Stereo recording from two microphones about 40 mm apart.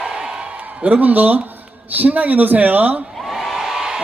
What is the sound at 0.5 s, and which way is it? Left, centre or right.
A woman's voice, right.